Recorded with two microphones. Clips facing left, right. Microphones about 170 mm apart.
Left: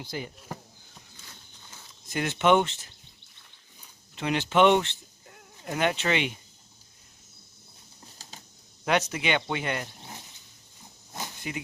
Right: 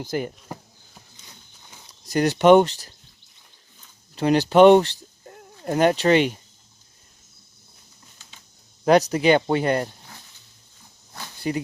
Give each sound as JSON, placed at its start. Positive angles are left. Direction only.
{"t": 0.0, "sound": "speech", "side_deg": -50}
{"t": 1.9, "sound": "speech", "side_deg": -40}
{"t": 4.1, "sound": "speech", "side_deg": -40}
{"t": 8.8, "sound": "speech", "side_deg": -35}
{"t": 10.0, "sound": "a sound", "side_deg": 20}
{"t": 11.3, "sound": "a sound", "side_deg": -35}